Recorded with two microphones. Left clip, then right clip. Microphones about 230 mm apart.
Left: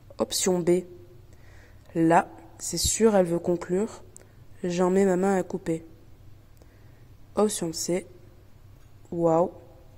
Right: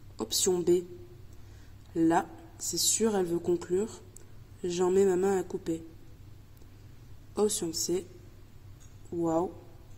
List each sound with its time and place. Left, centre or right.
0.1 s speech: left
2.0 s a woman's voice: left
7.3 s a woman's voice: left
9.2 s a woman's voice: left